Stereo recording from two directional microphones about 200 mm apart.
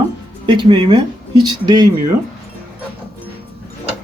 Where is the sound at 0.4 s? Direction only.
25° right (ahead or behind).